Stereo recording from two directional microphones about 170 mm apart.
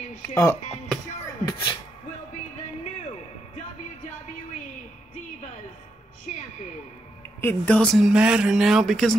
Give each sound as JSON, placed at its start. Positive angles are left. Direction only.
{"t": 0.3, "sound": "speech", "side_deg": 15}
{"t": 7.4, "sound": "speech", "side_deg": 5}